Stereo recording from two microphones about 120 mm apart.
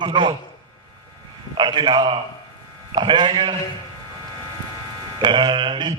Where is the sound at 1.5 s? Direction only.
40° right (ahead or behind).